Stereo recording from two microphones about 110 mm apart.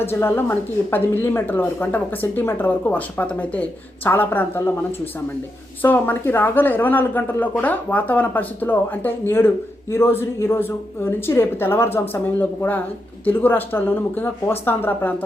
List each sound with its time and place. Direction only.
0.0 s speech: 20° left (ahead or behind)
5.8 s speech: 15° left (ahead or behind)